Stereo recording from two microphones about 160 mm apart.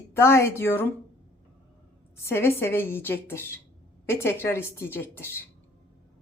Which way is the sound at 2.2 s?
15° left (ahead or behind).